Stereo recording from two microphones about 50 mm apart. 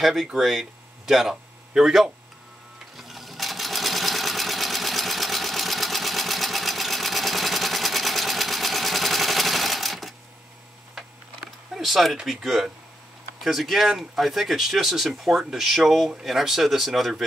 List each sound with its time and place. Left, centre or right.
0.0 s speech: centre
3.0 s sewing machine: centre
11.7 s speech: centre